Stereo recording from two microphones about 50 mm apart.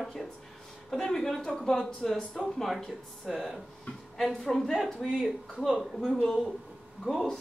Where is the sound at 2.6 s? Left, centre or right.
Centre.